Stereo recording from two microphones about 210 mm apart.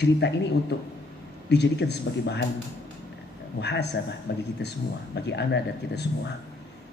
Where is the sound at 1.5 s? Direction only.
55° left (ahead or behind).